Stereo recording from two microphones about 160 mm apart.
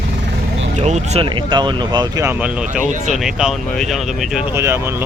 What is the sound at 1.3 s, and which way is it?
Speech, 30° right (ahead or behind).